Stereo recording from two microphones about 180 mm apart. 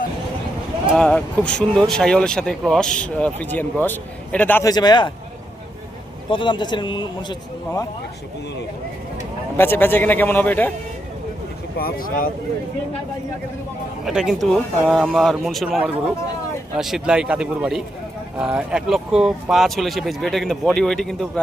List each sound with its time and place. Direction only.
0.9 s speech: 5° left (ahead or behind)
4.7 s speech: 25° left (ahead or behind)
6.3 s speech: 25° left (ahead or behind)
9.6 s a man's voice: 10° left (ahead or behind)
11.8 s speech: 50° left (ahead or behind)
14.0 s speech: 5° right (ahead or behind)